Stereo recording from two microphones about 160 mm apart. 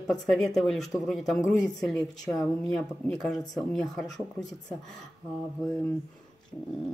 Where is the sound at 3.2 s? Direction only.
Centre (ahead or behind).